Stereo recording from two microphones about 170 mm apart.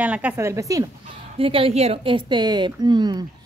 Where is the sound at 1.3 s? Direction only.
35° right (ahead or behind).